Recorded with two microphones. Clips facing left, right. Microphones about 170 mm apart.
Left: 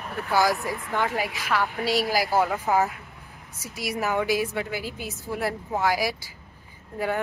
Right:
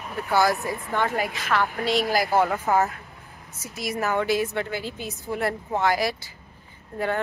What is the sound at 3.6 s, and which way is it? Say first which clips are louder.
Speech: right 1 dB; 10° left (ahead or behind).